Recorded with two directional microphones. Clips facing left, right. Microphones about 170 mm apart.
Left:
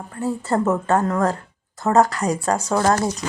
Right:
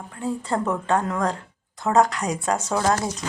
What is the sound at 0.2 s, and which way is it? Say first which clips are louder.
A woman's voice: left 4 dB; 5° left (ahead or behind).